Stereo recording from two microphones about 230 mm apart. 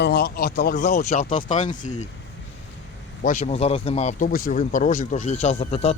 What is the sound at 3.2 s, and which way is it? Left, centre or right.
Speech, left.